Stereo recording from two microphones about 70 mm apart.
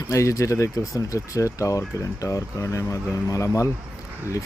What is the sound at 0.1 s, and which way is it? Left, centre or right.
Speech, left.